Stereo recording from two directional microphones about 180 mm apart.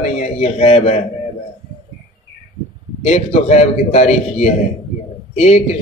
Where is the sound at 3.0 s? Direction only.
40° left (ahead or behind).